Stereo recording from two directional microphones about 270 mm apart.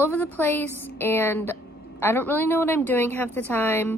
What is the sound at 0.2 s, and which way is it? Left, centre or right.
A woman's voice, centre.